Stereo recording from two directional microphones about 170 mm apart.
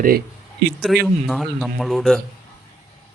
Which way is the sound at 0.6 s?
85° right.